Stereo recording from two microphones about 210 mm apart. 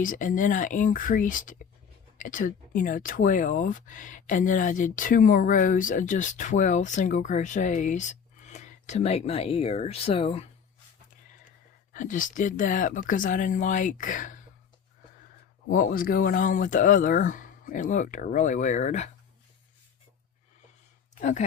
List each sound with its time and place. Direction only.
0.0 s speech: 40° left (ahead or behind)
11.9 s speech: 40° left (ahead or behind)
15.7 s speech: 40° left (ahead or behind)
21.2 s speech: 35° left (ahead or behind)